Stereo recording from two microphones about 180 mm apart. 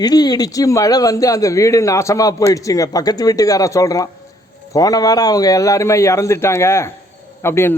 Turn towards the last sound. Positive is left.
turn(degrees=15)  # may be behind; listen again after turning